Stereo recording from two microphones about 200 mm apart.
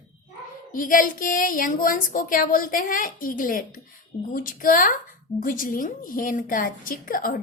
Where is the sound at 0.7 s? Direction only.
45° left (ahead or behind).